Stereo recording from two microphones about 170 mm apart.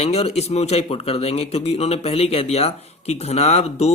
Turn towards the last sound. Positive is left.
turn(degrees=40)  # may be behind; listen again after turning